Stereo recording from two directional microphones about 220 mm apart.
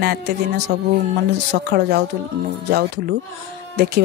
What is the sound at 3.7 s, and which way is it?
Speech, 45° right (ahead or behind).